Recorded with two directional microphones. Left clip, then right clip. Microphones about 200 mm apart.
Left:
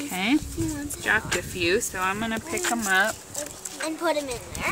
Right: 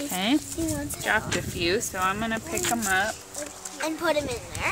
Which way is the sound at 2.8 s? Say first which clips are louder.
Left 4 dB; 20° left (ahead or behind).